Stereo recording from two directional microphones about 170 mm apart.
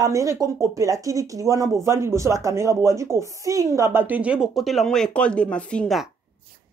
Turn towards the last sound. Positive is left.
turn(degrees=5)  # may be behind; listen again after turning